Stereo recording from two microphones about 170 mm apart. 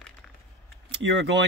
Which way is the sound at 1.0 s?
90° right.